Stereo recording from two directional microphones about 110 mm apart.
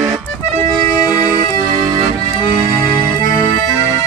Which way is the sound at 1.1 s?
15° right (ahead or behind).